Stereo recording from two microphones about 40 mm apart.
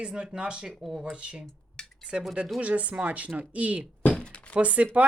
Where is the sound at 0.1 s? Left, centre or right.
Centre.